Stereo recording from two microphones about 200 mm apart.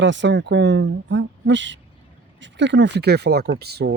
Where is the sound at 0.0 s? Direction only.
65° right (ahead or behind).